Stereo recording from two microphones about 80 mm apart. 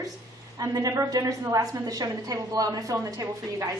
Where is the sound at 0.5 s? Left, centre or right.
Right.